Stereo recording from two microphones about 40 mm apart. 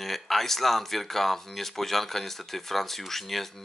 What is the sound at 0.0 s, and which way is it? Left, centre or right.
Speech, centre.